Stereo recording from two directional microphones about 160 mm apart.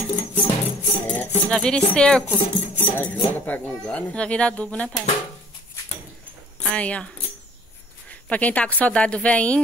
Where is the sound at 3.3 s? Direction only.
10° left (ahead or behind).